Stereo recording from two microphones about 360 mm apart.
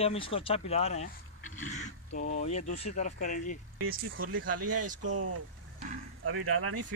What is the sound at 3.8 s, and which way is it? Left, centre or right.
Speech, right.